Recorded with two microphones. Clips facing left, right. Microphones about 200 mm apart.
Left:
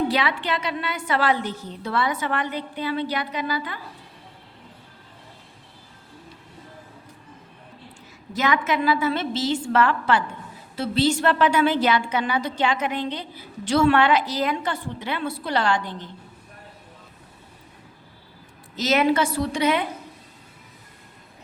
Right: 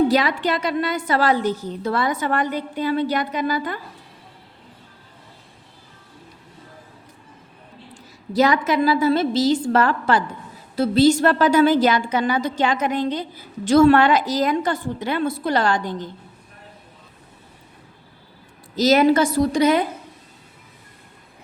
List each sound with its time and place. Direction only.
0.1 s a woman's voice: 40° right (ahead or behind)
8.3 s a woman's voice: 35° right (ahead or behind)
18.8 s a woman's voice: 40° right (ahead or behind)